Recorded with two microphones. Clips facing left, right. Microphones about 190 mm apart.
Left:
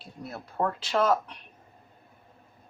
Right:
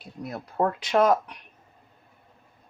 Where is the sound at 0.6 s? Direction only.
15° right (ahead or behind).